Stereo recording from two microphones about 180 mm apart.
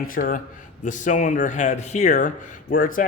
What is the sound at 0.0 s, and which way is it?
Speech, 50° left (ahead or behind).